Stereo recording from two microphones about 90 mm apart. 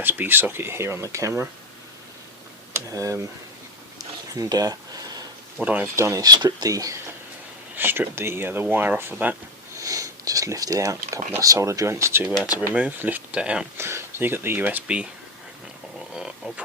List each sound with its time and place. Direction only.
0.0 s speech: 20° right (ahead or behind)
2.9 s speech: 35° right (ahead or behind)
3.9 s a sound: 45° right (ahead or behind)
5.6 s speech: 20° right (ahead or behind)
6.0 s speech: 35° right (ahead or behind)
6.2 s speech: 50° right (ahead or behind)
7.8 s speech: 25° right (ahead or behind)
9.7 s speech: 40° right (ahead or behind)
12.7 s speech: 15° right (ahead or behind)
13.7 s speech: 30° right (ahead or behind)
16.1 s a sound: 10° right (ahead or behind)